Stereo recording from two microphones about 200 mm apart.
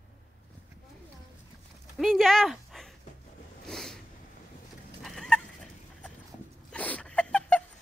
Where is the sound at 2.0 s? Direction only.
Centre (ahead or behind).